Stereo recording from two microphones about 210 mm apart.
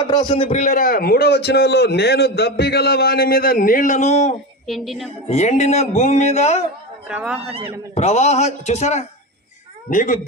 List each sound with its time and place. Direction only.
0.1 s a man's voice: 20° left (ahead or behind)
4.6 s a woman's voice: centre (ahead or behind)
5.3 s speech: 30° left (ahead or behind)
7.1 s a woman's voice: 5° right (ahead or behind)
7.9 s speech: 30° left (ahead or behind)